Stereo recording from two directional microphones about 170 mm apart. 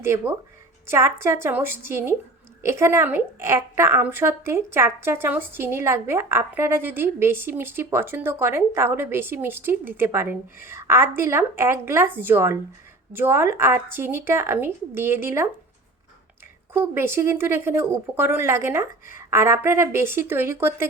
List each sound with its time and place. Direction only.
0.0 s a woman's voice: 15° right (ahead or behind)
16.7 s a woman's voice: 15° right (ahead or behind)